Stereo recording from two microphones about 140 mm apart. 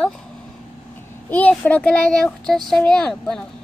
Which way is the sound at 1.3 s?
10° left (ahead or behind).